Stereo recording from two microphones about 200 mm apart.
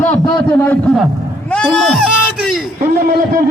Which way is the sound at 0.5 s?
10° left (ahead or behind).